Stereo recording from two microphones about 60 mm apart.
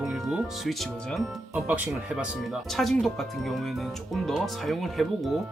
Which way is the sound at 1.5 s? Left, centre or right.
Right.